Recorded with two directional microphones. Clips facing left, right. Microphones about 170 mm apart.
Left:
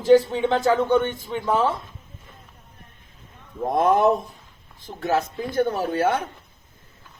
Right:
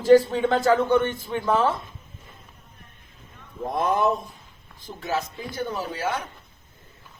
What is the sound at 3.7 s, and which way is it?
Speech, 50° left (ahead or behind).